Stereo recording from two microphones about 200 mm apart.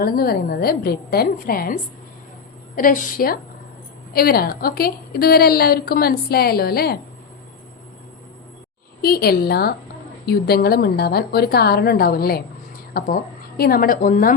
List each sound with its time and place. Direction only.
0.0 s a woman's voice: 50° left (ahead or behind)
9.0 s a woman's voice: 50° left (ahead or behind)